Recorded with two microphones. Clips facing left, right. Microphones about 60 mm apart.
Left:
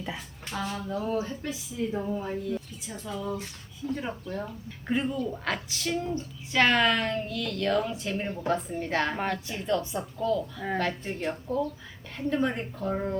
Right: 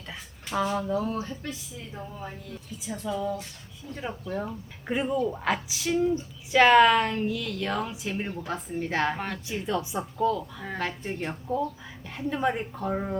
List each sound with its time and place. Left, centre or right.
0.5 s a woman's voice: centre
1.1 s a woman's voice: centre
1.9 s speech: centre
2.8 s a woman's voice: centre